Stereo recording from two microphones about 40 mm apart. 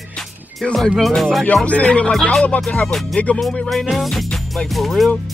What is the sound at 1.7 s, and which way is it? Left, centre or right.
Speech, left.